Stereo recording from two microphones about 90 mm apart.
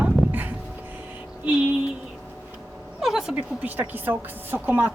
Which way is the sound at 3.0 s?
5° right (ahead or behind).